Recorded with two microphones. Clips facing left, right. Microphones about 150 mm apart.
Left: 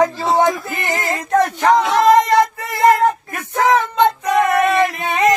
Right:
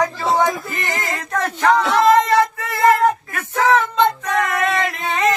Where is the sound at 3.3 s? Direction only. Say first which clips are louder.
Left 1 dB; 15° left (ahead or behind).